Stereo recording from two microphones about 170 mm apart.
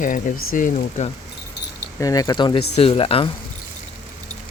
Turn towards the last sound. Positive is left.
turn(degrees=35)  # may be behind; listen again after turning